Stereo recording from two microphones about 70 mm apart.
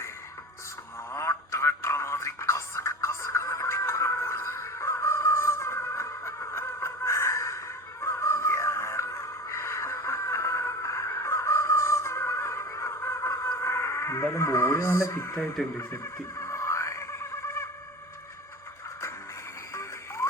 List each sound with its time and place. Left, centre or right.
1.1 s a sound: left
8.0 s music: left
15.8 s music: left
19.7 s music: left